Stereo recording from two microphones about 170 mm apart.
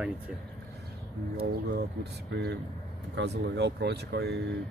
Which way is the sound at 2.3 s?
80° right.